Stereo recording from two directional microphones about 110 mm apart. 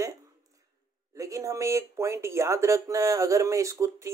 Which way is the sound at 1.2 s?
30° right (ahead or behind).